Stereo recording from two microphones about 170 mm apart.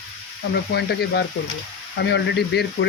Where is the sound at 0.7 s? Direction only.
75° left (ahead or behind).